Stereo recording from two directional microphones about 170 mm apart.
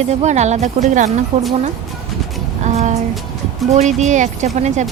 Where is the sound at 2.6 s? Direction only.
40° right (ahead or behind).